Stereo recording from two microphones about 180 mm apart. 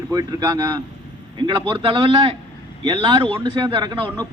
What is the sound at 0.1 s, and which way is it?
A man's voice, 20° right (ahead or behind).